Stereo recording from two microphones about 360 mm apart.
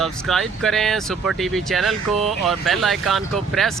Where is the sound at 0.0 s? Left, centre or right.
Centre.